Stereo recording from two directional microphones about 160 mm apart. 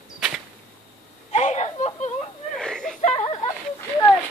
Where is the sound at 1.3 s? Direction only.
45° left (ahead or behind).